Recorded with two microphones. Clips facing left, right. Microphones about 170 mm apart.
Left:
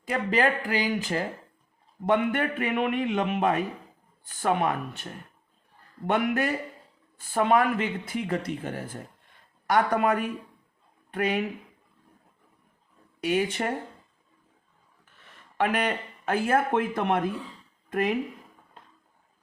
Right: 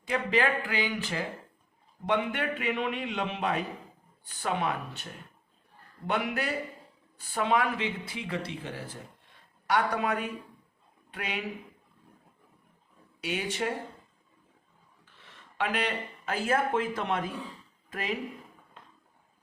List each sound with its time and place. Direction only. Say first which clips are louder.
0.1 s a man's voice: left 2 dB; 40° left (ahead or behind)
6.1 s a man's voice: left 5 dB; 50° left (ahead or behind)
13.2 s a man's voice: left 6 dB; 50° left (ahead or behind)
15.5 s speech: left 5 dB; 50° left (ahead or behind)